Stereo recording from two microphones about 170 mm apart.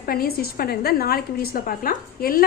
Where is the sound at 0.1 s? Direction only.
60° left (ahead or behind).